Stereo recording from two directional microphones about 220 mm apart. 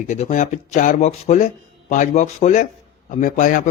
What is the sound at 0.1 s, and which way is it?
Speech, 30° left (ahead or behind).